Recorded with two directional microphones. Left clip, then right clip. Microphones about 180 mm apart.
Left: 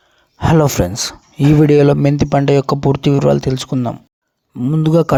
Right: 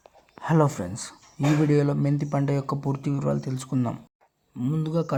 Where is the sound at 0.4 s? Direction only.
45° left (ahead or behind).